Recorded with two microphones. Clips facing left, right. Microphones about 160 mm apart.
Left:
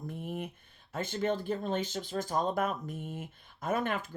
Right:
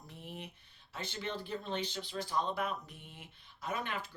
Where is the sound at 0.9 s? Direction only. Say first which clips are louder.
Left 9 dB; 50° left (ahead or behind).